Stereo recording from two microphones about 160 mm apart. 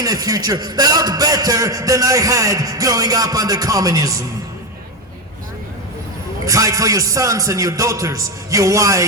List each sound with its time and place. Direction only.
0.0 s a man's voice: 20° right (ahead or behind)
6.4 s a man's voice: 20° right (ahead or behind)